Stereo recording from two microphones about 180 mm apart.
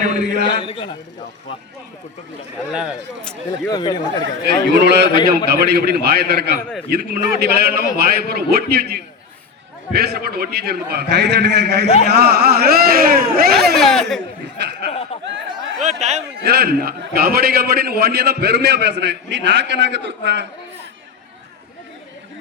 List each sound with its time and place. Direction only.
0.4 s speech: 25° left (ahead or behind)
2.7 s speech: 5° right (ahead or behind)
3.5 s speech: 25° left (ahead or behind)
4.2 s a man's voice: 65° right (ahead or behind)
13.7 s speech: centre (ahead or behind)
14.6 s a sound: 65° right (ahead or behind)
14.8 s laughter: 30° left (ahead or behind)
15.8 s speech: 40° right (ahead or behind)
16.4 s a man's voice: 60° right (ahead or behind); by 20.5 s 75° right (ahead or behind)